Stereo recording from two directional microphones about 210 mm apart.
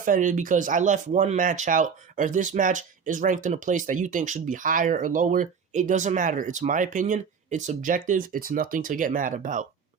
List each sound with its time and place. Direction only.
0.0 s speech: 40° right (ahead or behind)